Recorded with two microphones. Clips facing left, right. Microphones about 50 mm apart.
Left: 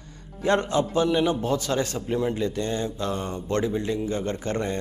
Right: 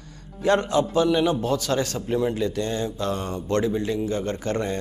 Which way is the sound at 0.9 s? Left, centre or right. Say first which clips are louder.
Right 1 dB; left.